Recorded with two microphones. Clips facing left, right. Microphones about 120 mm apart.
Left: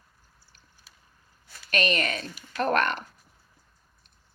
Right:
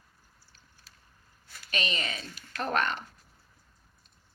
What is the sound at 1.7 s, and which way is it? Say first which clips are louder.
Speech: left 7 dB; 65° left (ahead or behind).